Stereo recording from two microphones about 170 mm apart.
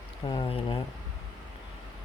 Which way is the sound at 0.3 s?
30° left (ahead or behind).